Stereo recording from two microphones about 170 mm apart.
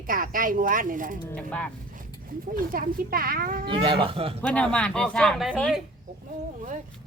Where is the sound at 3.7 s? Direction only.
35° right (ahead or behind).